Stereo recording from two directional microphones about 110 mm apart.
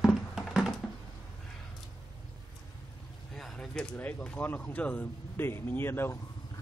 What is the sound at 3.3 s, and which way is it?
Speech, 5° left (ahead or behind).